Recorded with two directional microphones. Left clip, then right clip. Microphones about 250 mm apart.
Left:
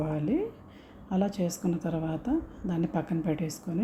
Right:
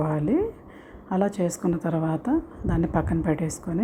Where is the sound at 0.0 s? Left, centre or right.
Centre.